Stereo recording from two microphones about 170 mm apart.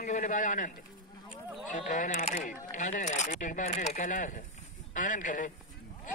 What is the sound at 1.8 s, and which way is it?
A man's voice, 45° left (ahead or behind).